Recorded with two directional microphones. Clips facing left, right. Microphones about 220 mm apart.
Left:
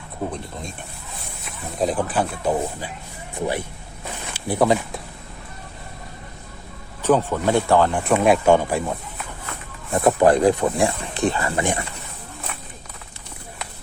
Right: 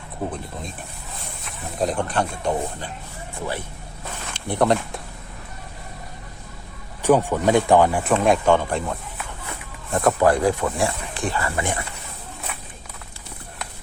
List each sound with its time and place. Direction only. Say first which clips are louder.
0.3 s speech: even; centre (ahead or behind)
1.8 s speech: left 1 dB; centre (ahead or behind)
4.4 s speech: left 1 dB; 5° left (ahead or behind)
7.0 s speech: right 1 dB; 15° right (ahead or behind)
8.1 s speech: left 3 dB; 10° left (ahead or behind)